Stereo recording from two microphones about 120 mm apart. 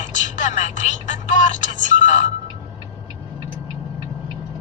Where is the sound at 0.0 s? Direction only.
85° left.